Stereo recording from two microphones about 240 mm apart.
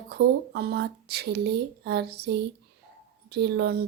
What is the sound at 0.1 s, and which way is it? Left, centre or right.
Speech, right.